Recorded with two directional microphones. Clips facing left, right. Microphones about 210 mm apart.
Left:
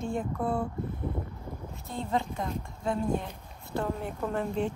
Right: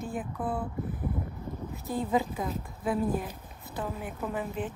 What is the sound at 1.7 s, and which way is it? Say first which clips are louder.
Speech: right 3 dB; centre (ahead or behind).